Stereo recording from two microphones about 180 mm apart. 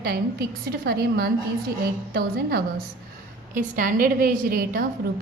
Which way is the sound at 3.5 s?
45° right (ahead or behind).